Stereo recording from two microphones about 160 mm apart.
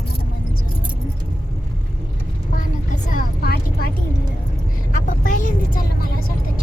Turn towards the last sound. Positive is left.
turn(degrees=55)  # may be behind; listen again after turning